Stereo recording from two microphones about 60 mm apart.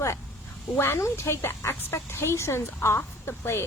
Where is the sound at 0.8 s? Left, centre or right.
Left.